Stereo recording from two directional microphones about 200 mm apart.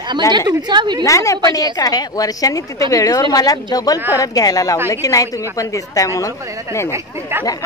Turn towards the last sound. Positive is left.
turn(degrees=-15)  # may be behind; listen again after turning